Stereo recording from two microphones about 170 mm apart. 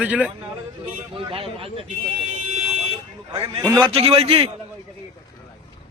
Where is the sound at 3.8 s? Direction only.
35° right (ahead or behind).